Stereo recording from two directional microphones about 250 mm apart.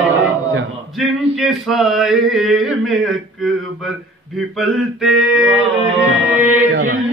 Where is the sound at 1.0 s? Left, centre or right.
Centre.